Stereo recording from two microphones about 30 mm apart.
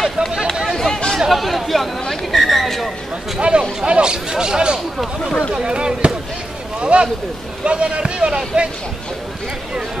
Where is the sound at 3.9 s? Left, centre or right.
Right.